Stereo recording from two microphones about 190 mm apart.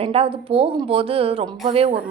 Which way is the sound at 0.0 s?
30° right (ahead or behind).